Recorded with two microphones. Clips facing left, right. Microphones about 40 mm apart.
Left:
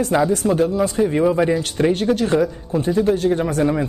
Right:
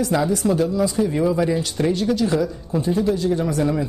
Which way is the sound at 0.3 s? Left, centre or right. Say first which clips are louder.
Left 2 dB; left.